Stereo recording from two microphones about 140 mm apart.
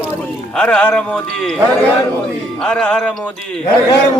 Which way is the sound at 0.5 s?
5° left (ahead or behind).